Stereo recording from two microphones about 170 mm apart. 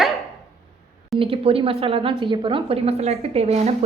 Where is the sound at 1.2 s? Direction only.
35° right (ahead or behind).